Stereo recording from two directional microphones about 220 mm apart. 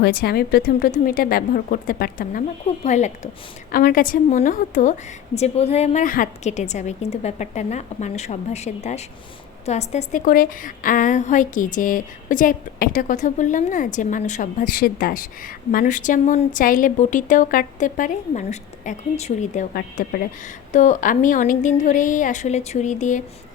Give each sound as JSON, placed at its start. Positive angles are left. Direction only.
{"t": 0.0, "sound": "a woman's voice", "side_deg": 45}